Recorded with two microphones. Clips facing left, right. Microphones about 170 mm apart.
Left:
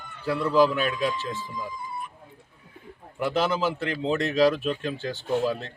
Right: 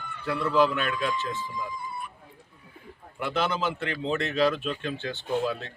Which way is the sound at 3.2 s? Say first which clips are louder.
Left 3 dB; 40° left (ahead or behind).